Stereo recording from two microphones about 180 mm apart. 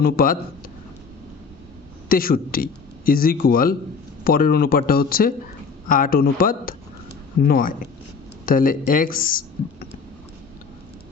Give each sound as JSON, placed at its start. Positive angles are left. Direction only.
{"t": 0.0, "sound": "speech", "side_deg": 55}
{"t": 2.0, "sound": "speech", "side_deg": 55}